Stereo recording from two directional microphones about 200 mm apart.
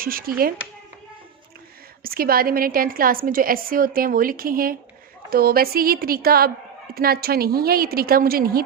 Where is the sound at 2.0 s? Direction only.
45° right (ahead or behind).